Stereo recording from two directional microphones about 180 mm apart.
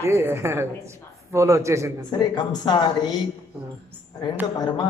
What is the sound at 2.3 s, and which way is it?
Mantra, 25° left (ahead or behind).